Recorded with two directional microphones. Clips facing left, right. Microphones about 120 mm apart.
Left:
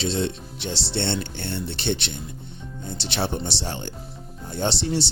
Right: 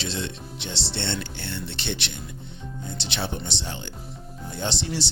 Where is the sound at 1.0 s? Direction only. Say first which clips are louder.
Left 4 dB; 30° left (ahead or behind).